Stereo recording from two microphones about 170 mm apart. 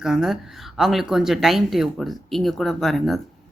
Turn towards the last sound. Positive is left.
turn(degrees=0)  # may be behind; listen again after turning